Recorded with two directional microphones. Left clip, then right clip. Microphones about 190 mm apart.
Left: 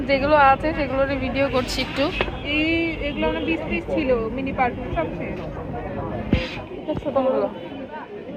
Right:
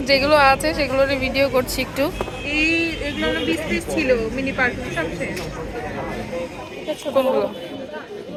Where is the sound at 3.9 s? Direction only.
25° right (ahead or behind).